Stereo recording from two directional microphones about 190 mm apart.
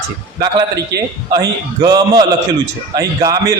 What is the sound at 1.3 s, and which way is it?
A man's voice, 20° right (ahead or behind).